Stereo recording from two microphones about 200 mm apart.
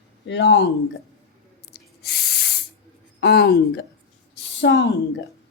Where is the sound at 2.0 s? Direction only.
55° left (ahead or behind).